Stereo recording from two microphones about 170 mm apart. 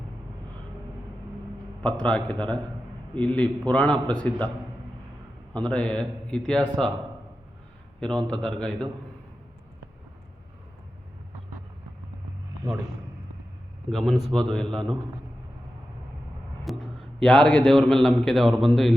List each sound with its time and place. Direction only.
1.8 s a man's voice: 5° left (ahead or behind)
5.5 s a man's voice: 5° left (ahead or behind)
8.0 s a man's voice: 5° left (ahead or behind)
13.9 s a man's voice: centre (ahead or behind)
16.6 s a man's voice: centre (ahead or behind)